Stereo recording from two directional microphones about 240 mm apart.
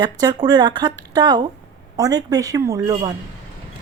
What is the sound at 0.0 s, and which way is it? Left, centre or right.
Speech, centre.